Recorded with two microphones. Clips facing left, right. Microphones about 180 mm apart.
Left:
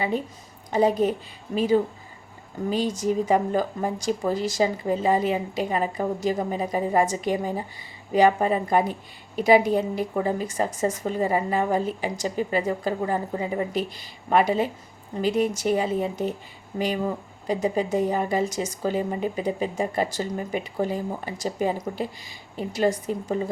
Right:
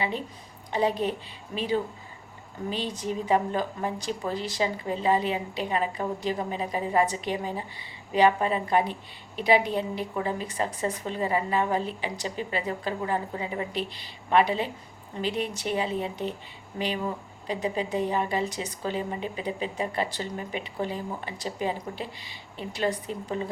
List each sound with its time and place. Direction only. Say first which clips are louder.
0.7 s a woman's voice: left 5 dB; 45° left (ahead or behind)